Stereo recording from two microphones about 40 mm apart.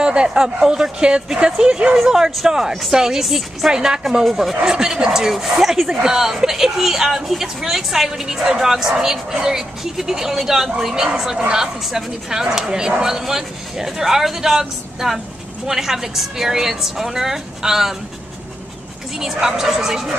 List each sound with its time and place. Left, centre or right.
0.0 s speech: right
2.0 s speech: centre
3.7 s speech: centre
5.3 s speech: centre
19.4 s speech: centre